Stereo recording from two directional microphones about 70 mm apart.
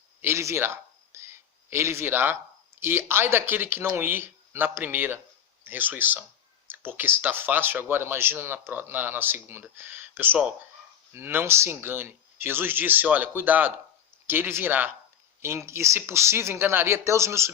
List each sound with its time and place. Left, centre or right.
0.2 s speech: right
0.6 s a sound: right
2.8 s speech: right
15.4 s speech: right